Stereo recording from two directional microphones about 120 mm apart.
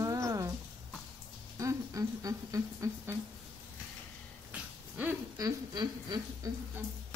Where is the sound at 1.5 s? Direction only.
25° right (ahead or behind).